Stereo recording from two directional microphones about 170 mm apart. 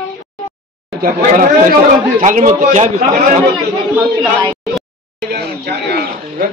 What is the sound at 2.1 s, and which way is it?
Speech, 50° right (ahead or behind).